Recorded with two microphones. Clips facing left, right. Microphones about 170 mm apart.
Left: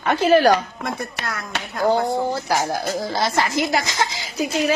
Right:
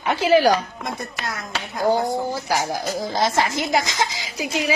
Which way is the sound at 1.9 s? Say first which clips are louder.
Left 1 dB; 10° right (ahead or behind).